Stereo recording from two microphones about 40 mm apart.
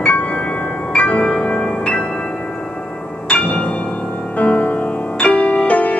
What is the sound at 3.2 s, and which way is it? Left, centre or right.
Music, left.